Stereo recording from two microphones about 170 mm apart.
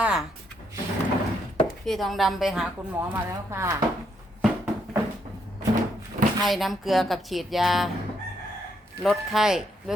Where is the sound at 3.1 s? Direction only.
20° right (ahead or behind).